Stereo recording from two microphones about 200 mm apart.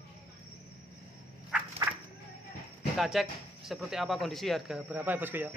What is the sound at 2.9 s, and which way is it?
Speech, centre (ahead or behind).